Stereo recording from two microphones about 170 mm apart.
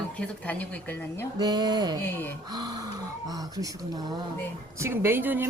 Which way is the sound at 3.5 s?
20° right (ahead or behind).